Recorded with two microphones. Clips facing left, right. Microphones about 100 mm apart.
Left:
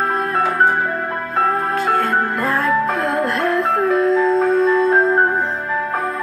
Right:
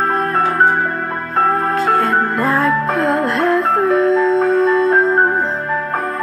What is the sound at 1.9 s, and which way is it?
Music, centre (ahead or behind).